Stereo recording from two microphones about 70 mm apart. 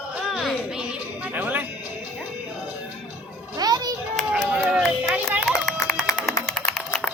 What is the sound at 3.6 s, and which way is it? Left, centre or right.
Children playing, right.